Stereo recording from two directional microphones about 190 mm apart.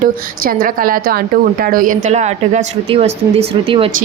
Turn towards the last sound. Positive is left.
turn(degrees=-30)  # may be behind; listen again after turning